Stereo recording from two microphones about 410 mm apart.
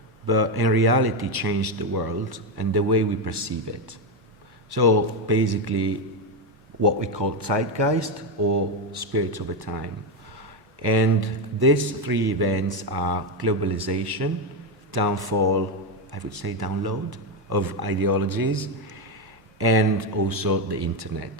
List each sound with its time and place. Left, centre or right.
0.3 s speech: right
6.8 s speech: right
8.9 s speech: right
19.5 s speech: right
20.2 s speech: right